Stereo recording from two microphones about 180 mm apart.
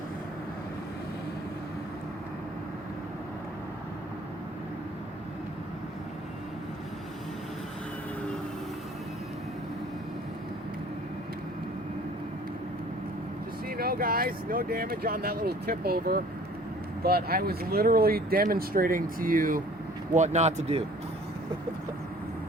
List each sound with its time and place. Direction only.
13.7 s speech: 55° right (ahead or behind)
20.1 s speech: 40° right (ahead or behind)